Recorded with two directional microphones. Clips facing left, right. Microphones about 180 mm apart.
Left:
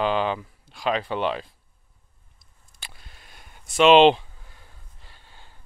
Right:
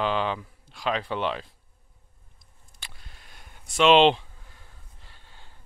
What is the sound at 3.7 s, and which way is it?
Speech, 5° left (ahead or behind).